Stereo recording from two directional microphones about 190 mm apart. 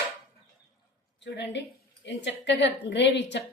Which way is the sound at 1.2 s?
70° left (ahead or behind).